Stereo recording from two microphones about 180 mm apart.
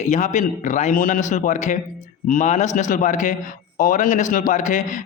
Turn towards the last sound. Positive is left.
turn(degrees=45)  # may be behind; listen again after turning